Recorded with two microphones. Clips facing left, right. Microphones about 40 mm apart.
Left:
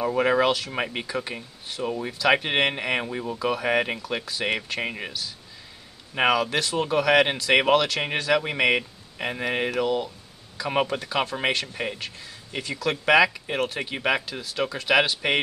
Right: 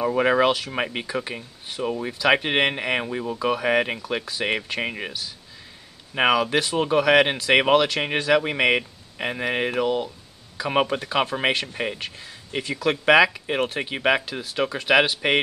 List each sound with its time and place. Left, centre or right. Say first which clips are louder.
0.0 s speech: right 2 dB; centre